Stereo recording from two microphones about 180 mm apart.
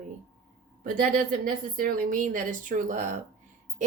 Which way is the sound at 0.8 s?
50° right (ahead or behind).